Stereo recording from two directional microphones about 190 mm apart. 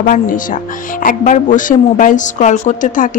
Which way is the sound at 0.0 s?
45° left (ahead or behind).